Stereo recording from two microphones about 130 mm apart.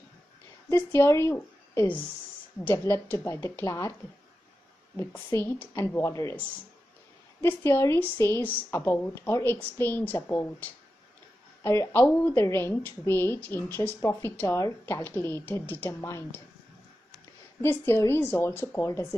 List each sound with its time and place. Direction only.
0.7 s a woman's voice: 20° left (ahead or behind)
4.9 s speech: 20° left (ahead or behind)
7.4 s a woman's voice: 15° left (ahead or behind)
17.6 s speech: 20° left (ahead or behind)